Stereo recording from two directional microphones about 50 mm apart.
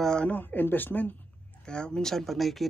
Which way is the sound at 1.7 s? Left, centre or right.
Centre.